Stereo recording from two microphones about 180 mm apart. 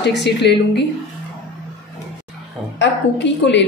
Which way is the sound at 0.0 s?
70° left (ahead or behind).